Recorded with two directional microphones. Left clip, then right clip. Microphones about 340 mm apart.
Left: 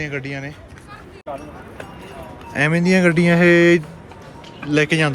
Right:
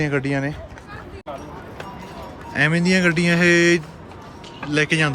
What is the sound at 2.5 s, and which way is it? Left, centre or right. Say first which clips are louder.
Speech: left 1 dB; centre.